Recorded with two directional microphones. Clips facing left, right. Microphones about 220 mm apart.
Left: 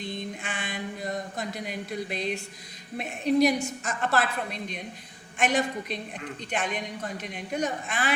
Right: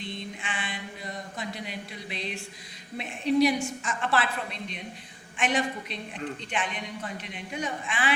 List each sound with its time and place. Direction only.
0.4 s a sound: 40° left (ahead or behind)
3.0 s a woman's voice: 45° left (ahead or behind)
5.4 s a woman's voice: 40° left (ahead or behind)